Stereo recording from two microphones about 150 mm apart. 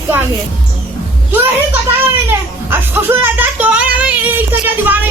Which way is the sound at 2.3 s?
15° right (ahead or behind).